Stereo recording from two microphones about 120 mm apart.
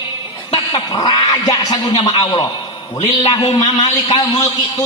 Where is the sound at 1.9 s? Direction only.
45° left (ahead or behind).